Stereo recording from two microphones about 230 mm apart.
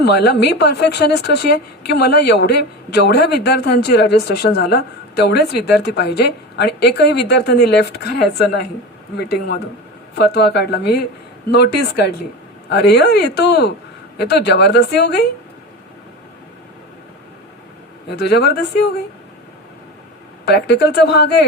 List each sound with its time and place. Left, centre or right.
0.0 s a woman's voice: left
18.3 s a woman's voice: left
20.4 s a woman's voice: left